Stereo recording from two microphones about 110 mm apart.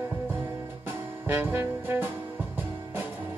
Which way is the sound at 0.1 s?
20° right (ahead or behind).